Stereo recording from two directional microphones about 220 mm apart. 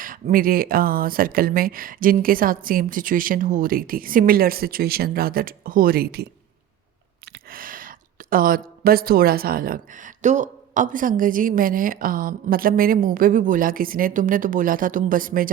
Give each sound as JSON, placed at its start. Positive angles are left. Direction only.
{"t": 0.0, "sound": "a woman's voice", "side_deg": -40}
{"t": 7.3, "sound": "a woman's voice", "side_deg": -40}